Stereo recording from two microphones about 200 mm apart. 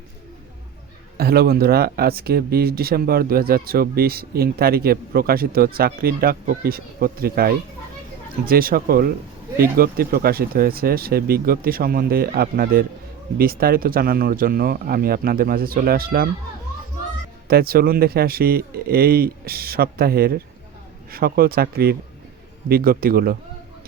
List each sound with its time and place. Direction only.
1.1 s speech: 50° right (ahead or behind)
17.5 s speech: 50° right (ahead or behind)